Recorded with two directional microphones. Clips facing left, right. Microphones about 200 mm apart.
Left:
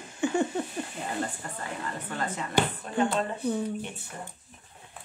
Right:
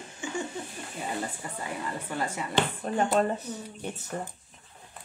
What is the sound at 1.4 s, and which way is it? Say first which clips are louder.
Speech: right 1 dB; 10° right (ahead or behind).